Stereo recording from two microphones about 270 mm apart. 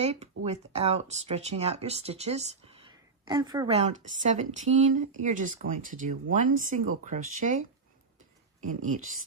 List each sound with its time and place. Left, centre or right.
0.0 s a woman's voice: right